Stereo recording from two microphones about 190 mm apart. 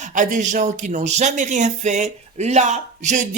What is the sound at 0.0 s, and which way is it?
Speech, 40° right (ahead or behind).